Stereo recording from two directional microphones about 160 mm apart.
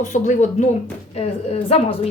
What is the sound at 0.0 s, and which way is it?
Speech, 50° left (ahead or behind).